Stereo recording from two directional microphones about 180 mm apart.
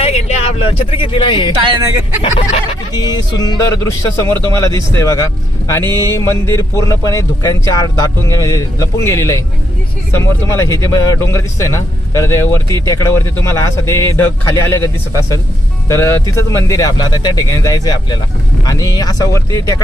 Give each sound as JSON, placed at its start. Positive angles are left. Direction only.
{"t": 0.0, "sound": "speech", "side_deg": 35}
{"t": 1.6, "sound": "speech", "side_deg": -20}
{"t": 2.9, "sound": "speech", "side_deg": 20}